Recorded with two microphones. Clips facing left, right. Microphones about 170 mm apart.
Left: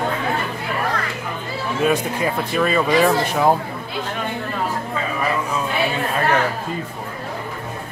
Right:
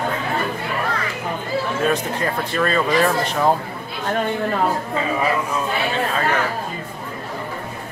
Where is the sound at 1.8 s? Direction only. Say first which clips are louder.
Left 5 dB; 10° left (ahead or behind).